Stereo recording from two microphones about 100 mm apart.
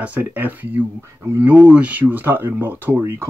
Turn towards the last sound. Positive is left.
turn(degrees=-25)  # may be behind; listen again after turning